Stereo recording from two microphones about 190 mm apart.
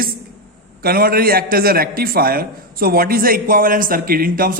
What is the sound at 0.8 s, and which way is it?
A man's voice, 50° right (ahead or behind).